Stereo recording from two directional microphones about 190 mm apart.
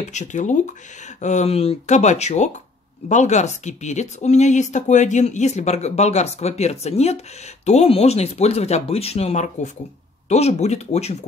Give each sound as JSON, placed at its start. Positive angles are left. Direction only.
{"t": 0.1, "sound": "speech", "side_deg": 40}